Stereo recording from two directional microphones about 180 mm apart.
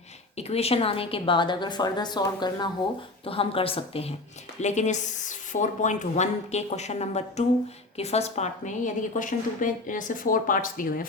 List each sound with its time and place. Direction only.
0.3 s a woman's voice: 35° left (ahead or behind)